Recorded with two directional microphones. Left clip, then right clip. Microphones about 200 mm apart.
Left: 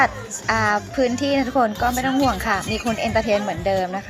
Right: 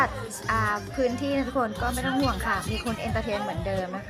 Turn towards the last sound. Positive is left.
turn(degrees=20)  # may be behind; listen again after turning